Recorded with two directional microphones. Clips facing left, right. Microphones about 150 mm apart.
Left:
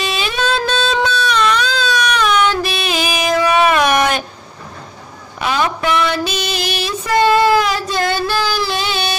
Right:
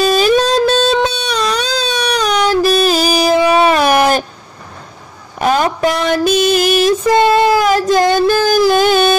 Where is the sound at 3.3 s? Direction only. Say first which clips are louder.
Even; 30° right (ahead or behind).